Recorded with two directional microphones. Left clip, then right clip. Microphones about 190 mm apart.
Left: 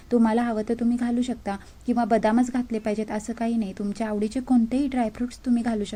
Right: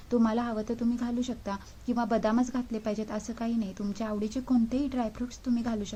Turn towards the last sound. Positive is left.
turn(degrees=20)  # may be behind; listen again after turning